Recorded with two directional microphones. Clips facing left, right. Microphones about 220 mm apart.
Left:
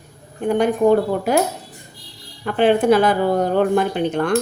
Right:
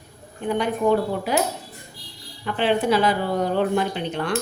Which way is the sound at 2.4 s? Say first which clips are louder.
Left 6 dB; 50° left (ahead or behind).